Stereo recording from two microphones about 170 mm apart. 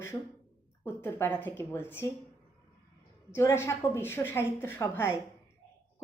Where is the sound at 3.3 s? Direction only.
15° left (ahead or behind).